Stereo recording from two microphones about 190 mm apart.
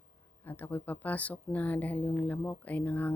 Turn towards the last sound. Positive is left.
turn(degrees=10)  # may be behind; listen again after turning